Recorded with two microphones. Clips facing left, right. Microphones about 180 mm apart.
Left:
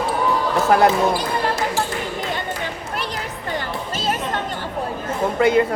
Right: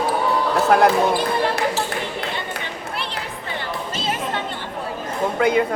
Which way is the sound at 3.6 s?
45° left (ahead or behind).